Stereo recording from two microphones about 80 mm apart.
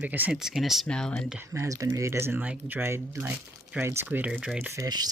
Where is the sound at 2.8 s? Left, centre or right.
Right.